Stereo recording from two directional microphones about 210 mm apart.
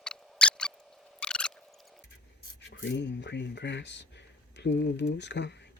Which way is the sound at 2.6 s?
60° left (ahead or behind).